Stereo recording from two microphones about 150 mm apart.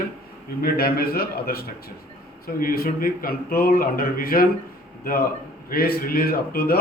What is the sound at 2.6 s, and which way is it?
A man's voice, 80° left.